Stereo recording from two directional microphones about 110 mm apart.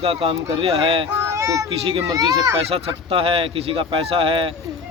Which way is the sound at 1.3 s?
30° right (ahead or behind).